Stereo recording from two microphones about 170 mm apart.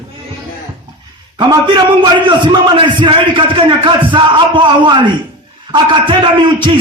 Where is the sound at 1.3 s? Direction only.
25° right (ahead or behind).